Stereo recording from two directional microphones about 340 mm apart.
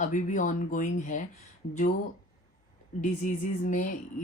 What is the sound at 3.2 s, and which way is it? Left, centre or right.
Speech, left.